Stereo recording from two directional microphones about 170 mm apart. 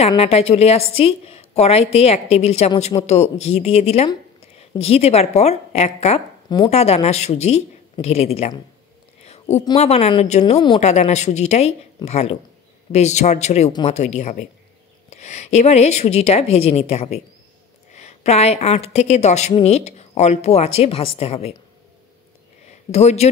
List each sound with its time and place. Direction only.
0.2 s a woman's voice: 35° left (ahead or behind)
9.2 s a sound: 40° left (ahead or behind)
9.8 s a woman's voice: 40° left (ahead or behind)
22.7 s speech: 40° left (ahead or behind)